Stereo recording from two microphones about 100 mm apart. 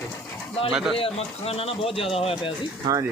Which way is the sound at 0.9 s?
75° left (ahead or behind).